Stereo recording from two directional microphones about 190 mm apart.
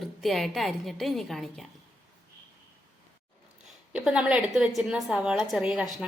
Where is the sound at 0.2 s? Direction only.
Centre (ahead or behind).